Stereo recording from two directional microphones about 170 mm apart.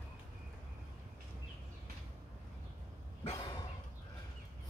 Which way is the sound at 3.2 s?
25° left (ahead or behind).